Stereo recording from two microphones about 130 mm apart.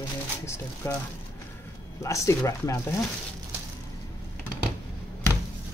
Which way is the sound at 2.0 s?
25° left (ahead or behind).